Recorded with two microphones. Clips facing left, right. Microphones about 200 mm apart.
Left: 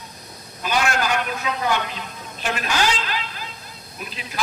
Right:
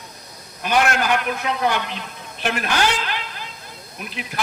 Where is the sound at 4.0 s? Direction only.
60° right (ahead or behind).